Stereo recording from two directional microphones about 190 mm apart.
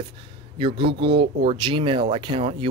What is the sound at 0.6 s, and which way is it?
Speech, 25° right (ahead or behind).